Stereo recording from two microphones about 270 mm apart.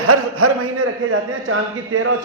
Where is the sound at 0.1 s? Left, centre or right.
Right.